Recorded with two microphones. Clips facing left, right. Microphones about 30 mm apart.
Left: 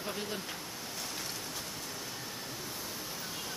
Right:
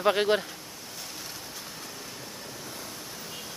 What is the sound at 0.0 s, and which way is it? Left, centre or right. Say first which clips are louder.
Speech: right 15 dB; right.